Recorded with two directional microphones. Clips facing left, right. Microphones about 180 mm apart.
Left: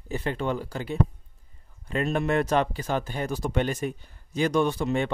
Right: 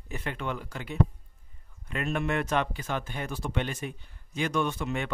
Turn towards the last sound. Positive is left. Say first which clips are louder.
# left 6 dB
turn(degrees=35)  # may be behind; listen again after turning